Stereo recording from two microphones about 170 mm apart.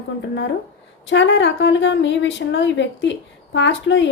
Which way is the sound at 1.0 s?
90° left.